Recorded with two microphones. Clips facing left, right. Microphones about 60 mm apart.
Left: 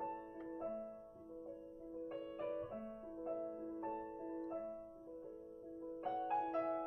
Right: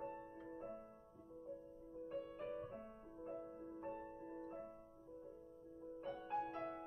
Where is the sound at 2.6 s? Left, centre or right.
Left.